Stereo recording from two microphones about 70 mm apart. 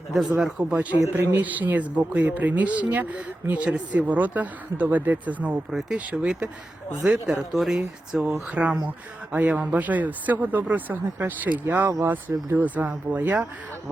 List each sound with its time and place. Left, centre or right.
0.3 s speech: centre
8.4 s speech: centre